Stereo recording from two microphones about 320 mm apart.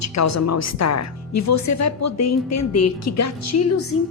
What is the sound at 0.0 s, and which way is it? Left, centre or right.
A woman's voice, left.